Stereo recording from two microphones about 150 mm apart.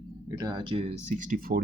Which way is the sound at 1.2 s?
70° right (ahead or behind).